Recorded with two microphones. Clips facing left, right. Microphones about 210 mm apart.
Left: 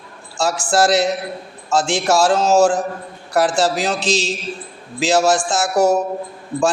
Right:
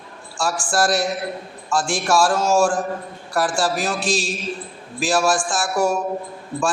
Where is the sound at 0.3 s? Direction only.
25° left (ahead or behind).